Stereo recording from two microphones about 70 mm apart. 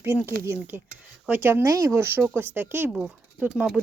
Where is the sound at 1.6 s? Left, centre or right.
Right.